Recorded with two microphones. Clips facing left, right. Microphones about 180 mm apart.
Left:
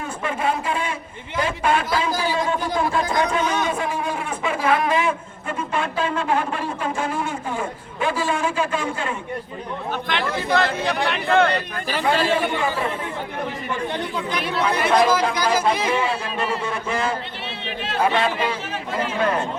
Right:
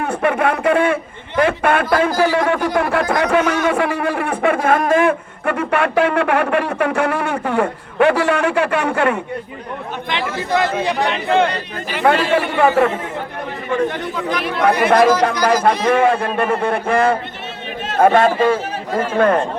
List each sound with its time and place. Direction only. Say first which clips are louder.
0.0 s a man's voice: right 7 dB; 65° right (ahead or behind)
10.2 s speech: right 3 dB; 10° right (ahead or behind)
12.0 s a man's voice: right 5 dB; 65° right (ahead or behind)
14.6 s a man's voice: right 6 dB; 65° right (ahead or behind)